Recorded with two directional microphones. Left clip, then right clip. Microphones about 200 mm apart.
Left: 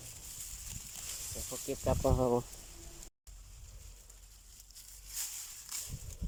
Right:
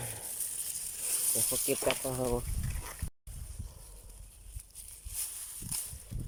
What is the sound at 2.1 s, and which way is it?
Speech, 5° left (ahead or behind).